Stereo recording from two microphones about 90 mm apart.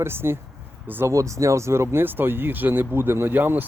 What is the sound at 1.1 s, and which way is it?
Speech, 35° right (ahead or behind).